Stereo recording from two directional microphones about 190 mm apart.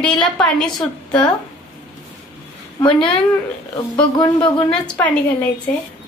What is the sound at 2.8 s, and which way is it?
Speech, 25° left (ahead or behind).